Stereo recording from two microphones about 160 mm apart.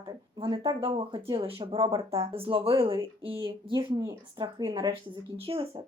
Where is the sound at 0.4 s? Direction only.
25° right (ahead or behind).